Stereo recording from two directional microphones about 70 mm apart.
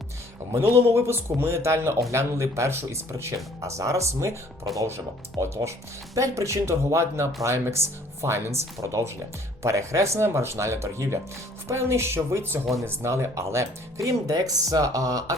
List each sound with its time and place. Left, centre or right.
0.5 s speech: right
14.3 s speech: right